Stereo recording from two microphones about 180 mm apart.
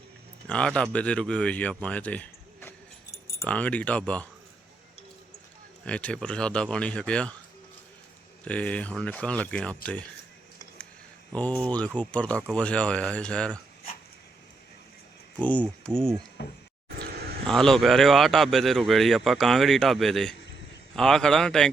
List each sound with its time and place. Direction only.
0.4 s speech: 5° left (ahead or behind)
5.8 s speech: 5° left (ahead or behind)
8.4 s speech: 5° left (ahead or behind)
11.3 s speech: 10° left (ahead or behind)
15.4 s speech: 10° left (ahead or behind)
16.4 s speech: 75° left (ahead or behind)
17.4 s speech: 5° left (ahead or behind)